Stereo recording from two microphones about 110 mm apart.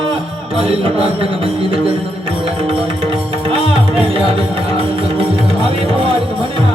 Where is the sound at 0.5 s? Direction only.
60° right (ahead or behind).